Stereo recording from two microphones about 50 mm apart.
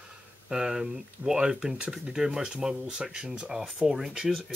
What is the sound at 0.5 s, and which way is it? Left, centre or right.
Speech, centre.